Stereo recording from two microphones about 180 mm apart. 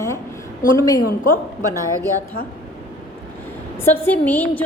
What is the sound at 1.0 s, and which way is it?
Speech, 45° left (ahead or behind).